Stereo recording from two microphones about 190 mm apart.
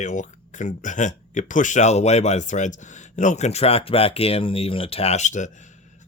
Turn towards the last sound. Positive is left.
turn(degrees=40)  # may be behind; listen again after turning